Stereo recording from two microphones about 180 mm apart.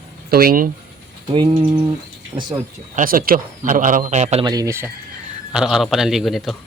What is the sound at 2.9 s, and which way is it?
Speech, 50° right (ahead or behind).